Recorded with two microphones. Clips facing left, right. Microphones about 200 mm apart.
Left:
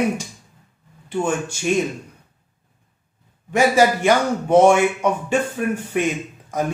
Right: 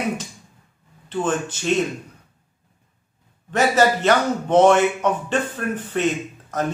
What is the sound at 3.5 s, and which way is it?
A man's voice, 10° left (ahead or behind).